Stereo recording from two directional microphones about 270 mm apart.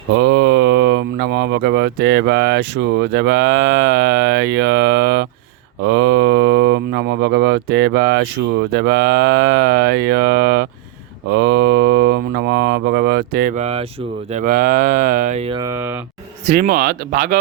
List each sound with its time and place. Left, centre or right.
0.1 s speech: right
5.8 s mantra: right
14.3 s speech: right; by 16.0 s centre
16.6 s mantra: right